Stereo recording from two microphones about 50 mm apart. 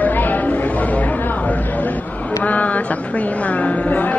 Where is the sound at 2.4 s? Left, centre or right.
Left.